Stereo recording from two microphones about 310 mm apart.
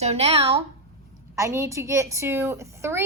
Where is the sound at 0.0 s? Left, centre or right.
Centre.